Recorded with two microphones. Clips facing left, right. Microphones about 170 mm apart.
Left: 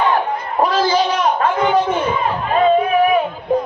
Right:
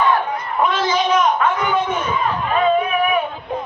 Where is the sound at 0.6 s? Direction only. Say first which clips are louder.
Left 3 dB; 35° left (ahead or behind).